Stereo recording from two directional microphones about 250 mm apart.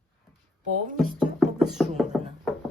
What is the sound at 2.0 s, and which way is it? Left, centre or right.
Music, centre.